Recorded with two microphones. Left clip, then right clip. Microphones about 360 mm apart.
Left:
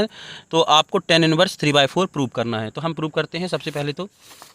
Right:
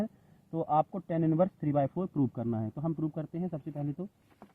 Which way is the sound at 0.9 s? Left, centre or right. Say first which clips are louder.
Left 15 dB; left.